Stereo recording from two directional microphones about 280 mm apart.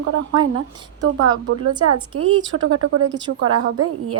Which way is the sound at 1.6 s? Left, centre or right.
Right.